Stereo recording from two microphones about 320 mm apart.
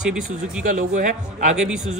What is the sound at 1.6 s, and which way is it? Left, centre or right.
Speech, centre.